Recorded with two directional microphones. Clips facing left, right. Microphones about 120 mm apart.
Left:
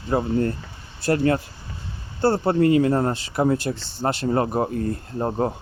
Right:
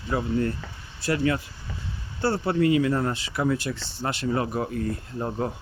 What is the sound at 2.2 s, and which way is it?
Speech, 45° left (ahead or behind).